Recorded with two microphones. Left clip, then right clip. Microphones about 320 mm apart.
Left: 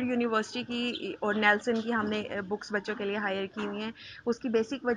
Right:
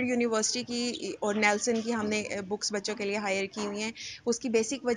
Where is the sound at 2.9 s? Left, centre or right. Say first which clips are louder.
Right 2 dB; centre.